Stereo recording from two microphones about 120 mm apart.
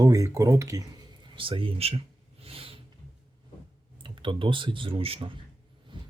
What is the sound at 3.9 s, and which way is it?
Speech, 45° right (ahead or behind).